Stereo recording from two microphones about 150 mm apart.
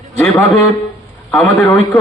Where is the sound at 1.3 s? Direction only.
Centre (ahead or behind).